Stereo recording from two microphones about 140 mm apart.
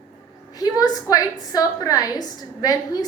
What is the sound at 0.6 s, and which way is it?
A woman's voice, 25° left (ahead or behind).